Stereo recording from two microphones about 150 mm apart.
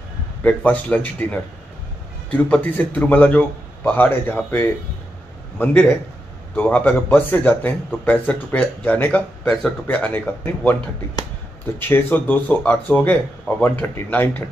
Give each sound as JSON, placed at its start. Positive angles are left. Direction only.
{"t": 0.4, "sound": "a man's voice", "side_deg": 10}
{"t": 11.9, "sound": "a man's voice", "side_deg": 15}